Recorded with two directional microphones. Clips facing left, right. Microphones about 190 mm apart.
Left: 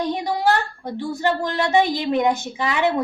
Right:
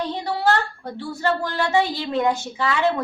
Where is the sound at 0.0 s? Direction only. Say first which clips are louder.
Left 2 dB; 15° left (ahead or behind).